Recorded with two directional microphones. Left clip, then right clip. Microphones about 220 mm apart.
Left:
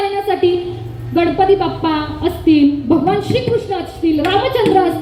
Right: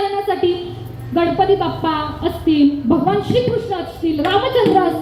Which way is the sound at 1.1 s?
55° left (ahead or behind).